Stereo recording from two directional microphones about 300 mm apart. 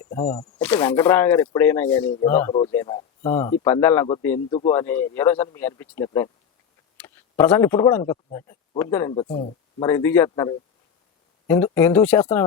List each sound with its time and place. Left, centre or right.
0.1 s speech: centre
9.2 s speech: left
9.8 s speech: centre